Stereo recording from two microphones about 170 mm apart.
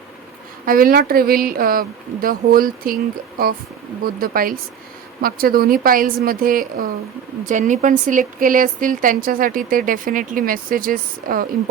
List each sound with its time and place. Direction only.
0.6 s a woman's voice: 55° right (ahead or behind)